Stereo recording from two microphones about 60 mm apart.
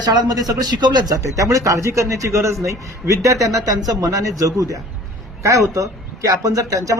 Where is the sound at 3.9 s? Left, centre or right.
Right.